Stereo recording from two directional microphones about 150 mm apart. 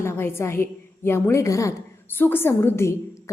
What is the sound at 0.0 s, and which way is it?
A woman's voice, 15° left (ahead or behind).